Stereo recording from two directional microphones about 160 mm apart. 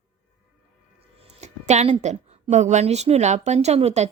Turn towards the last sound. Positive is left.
turn(degrees=-40)  # may be behind; listen again after turning